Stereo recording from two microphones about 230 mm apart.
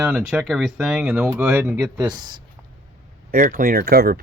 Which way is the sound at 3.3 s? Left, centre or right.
Right.